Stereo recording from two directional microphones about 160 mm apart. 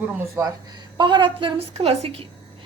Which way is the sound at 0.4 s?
20° right (ahead or behind).